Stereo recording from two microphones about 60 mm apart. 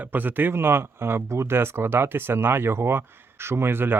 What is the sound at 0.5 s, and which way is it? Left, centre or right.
Speech, right.